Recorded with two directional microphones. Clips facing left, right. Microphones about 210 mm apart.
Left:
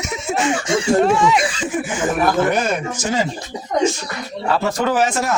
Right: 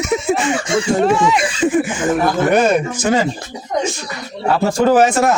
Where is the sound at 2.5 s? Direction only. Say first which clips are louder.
Right 6 dB; 60° right (ahead or behind).